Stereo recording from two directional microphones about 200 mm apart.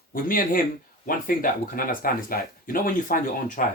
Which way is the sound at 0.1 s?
45° left (ahead or behind).